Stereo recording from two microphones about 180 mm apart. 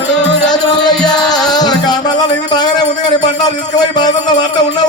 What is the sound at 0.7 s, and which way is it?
Music, 20° left (ahead or behind).